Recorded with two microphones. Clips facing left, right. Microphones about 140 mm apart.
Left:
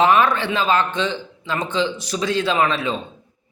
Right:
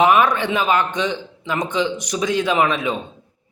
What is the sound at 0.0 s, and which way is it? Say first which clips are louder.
Speech: right 1 dB; 15° right (ahead or behind).